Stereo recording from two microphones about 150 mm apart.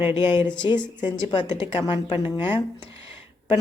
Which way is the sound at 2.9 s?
35° left (ahead or behind).